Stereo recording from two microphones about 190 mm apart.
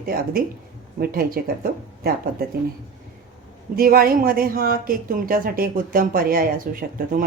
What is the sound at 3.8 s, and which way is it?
Speech, 50° right (ahead or behind).